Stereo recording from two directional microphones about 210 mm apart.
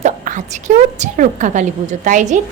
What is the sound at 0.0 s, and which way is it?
A woman's voice, 35° right (ahead or behind).